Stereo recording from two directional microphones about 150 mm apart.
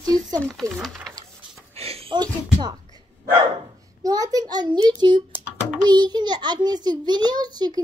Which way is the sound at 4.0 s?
25° right (ahead or behind).